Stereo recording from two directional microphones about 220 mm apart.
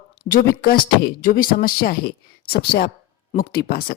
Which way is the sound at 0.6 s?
45° left (ahead or behind).